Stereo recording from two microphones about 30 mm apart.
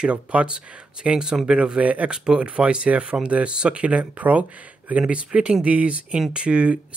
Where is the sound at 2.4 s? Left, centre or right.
Right.